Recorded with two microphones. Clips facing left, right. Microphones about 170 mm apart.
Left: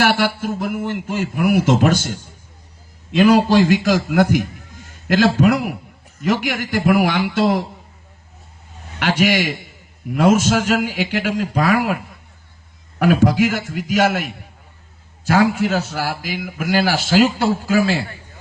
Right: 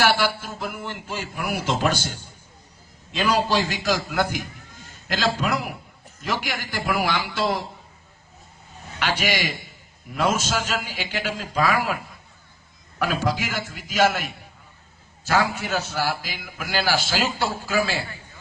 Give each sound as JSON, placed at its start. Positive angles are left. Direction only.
{"t": 0.0, "sound": "a man's voice", "side_deg": 60}
{"t": 9.0, "sound": "a man's voice", "side_deg": 60}
{"t": 13.0, "sound": "a man's voice", "side_deg": 55}
{"t": 15.7, "sound": "speech", "side_deg": 45}